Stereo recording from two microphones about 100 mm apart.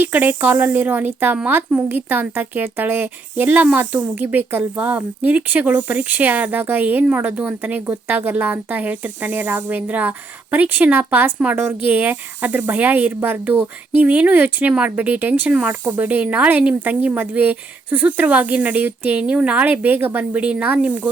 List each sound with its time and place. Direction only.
0.0 s speech: 20° right (ahead or behind)